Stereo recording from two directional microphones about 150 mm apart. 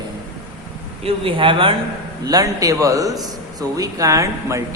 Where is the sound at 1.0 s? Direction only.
35° right (ahead or behind).